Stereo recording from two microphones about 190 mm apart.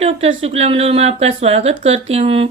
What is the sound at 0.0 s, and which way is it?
Speech, 30° right (ahead or behind).